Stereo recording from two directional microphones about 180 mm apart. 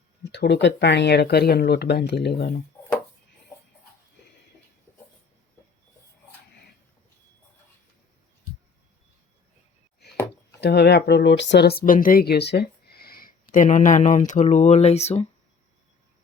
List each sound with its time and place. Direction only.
0.2 s speech: 70° left (ahead or behind)
10.6 s speech: 70° left (ahead or behind); by 15.3 s 35° left (ahead or behind)